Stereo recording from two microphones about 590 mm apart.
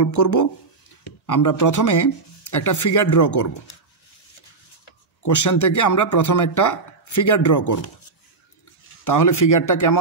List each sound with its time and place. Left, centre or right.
0.0 s speech: left
5.2 s speech: left
9.0 s speech: left